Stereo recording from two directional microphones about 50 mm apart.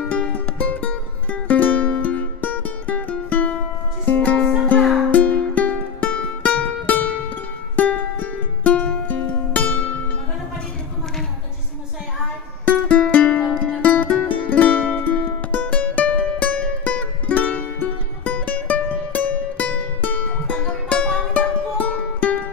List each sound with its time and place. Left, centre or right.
0.1 s music: left
12.6 s music: left